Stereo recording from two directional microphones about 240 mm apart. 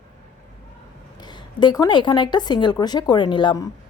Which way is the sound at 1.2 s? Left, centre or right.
Centre.